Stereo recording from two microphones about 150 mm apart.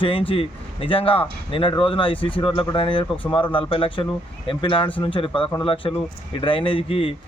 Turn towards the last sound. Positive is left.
turn(degrees=35)  # may be behind; listen again after turning